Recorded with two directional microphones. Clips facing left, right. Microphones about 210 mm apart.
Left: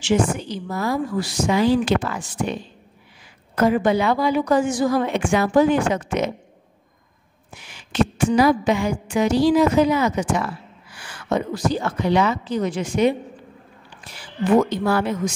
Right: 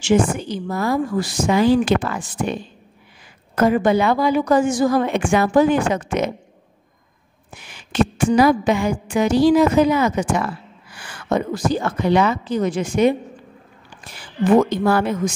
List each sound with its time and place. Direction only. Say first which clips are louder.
0.0 s a woman's voice: right 3 dB; 50° right (ahead or behind)
3.5 s a woman's voice: right 2 dB; 50° right (ahead or behind)
7.5 s a woman's voice: right 2 dB; 50° right (ahead or behind)